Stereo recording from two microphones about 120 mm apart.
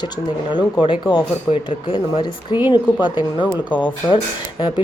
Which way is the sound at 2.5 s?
40° left (ahead or behind).